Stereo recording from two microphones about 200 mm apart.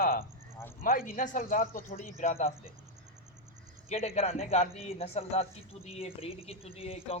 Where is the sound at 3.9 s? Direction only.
30° left (ahead or behind).